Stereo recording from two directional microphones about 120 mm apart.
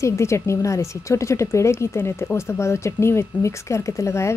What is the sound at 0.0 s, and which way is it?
Speech, 25° left (ahead or behind).